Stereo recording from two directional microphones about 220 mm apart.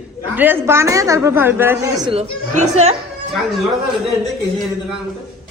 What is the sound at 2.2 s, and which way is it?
Speech, 30° right (ahead or behind).